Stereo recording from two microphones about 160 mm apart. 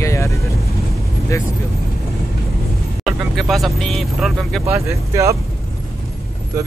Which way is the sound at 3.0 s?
Centre (ahead or behind).